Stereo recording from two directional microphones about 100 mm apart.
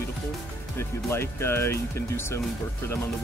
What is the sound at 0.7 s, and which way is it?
Speech, 25° left (ahead or behind).